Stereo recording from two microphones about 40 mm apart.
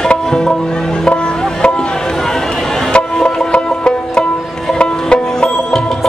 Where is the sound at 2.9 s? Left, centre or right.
Left.